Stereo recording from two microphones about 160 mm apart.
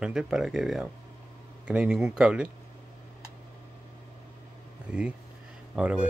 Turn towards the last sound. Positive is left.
turn(degrees=-5)  # may be behind; listen again after turning